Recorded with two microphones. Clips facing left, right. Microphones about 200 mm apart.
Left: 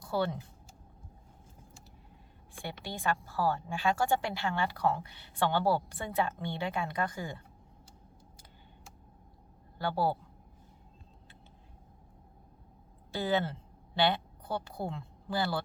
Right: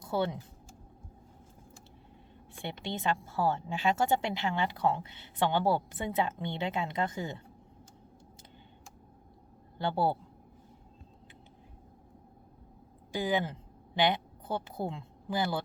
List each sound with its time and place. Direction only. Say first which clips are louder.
0.0 s speech: right 1 dB; 20° right (ahead or behind)
2.6 s speech: right 3 dB; 20° right (ahead or behind)
9.7 s speech: right 1 dB; 25° right (ahead or behind)
13.1 s a woman's voice: even; 15° right (ahead or behind)